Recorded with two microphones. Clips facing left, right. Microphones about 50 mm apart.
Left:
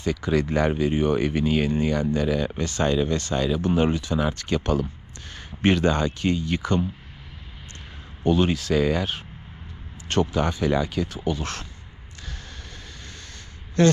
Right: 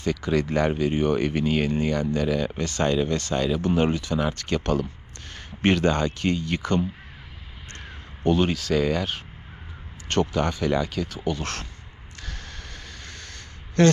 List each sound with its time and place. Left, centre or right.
0.0 s speech: right
8.2 s speech: right
11.3 s speech: right
13.8 s speech: right